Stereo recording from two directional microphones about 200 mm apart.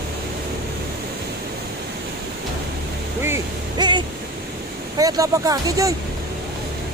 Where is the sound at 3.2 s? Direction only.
20° right (ahead or behind).